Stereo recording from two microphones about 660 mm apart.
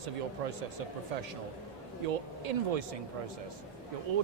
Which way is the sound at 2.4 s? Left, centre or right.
Right.